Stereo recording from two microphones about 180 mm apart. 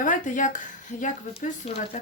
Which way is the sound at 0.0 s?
45° left (ahead or behind).